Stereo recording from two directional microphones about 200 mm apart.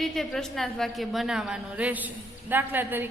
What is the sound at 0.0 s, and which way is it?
A woman's voice, centre (ahead or behind).